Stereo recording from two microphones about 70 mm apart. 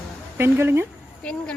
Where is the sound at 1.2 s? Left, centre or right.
Centre.